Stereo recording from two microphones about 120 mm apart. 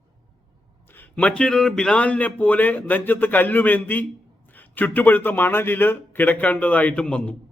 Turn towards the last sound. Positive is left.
turn(degrees=10)  # may be behind; listen again after turning